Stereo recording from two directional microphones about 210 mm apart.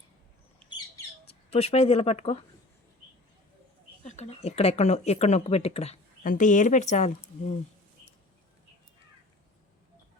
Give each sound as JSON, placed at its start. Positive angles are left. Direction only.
{"t": 1.3, "sound": "speech", "side_deg": 30}
{"t": 4.0, "sound": "speech", "side_deg": 30}